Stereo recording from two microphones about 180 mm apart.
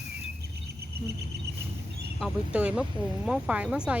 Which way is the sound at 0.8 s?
60° right (ahead or behind).